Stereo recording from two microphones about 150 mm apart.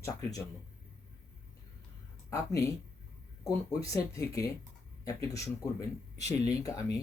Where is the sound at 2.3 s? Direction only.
20° left (ahead or behind).